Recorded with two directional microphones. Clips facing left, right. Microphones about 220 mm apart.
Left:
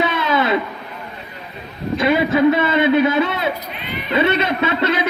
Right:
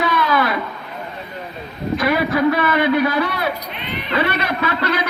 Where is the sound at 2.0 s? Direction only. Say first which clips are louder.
Left 3 dB; 25° left (ahead or behind).